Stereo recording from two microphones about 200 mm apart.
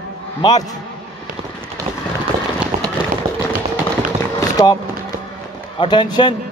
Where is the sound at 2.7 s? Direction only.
35° right (ahead or behind).